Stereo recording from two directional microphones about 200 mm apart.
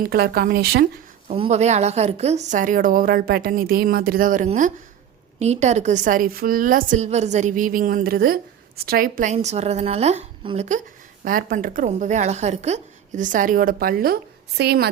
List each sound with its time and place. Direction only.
0.0 s speech: 50° right (ahead or behind)
1.3 s a woman's voice: 35° right (ahead or behind); by 14.8 s 55° right (ahead or behind)